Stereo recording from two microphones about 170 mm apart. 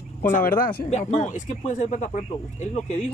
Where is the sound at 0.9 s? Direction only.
45° left (ahead or behind).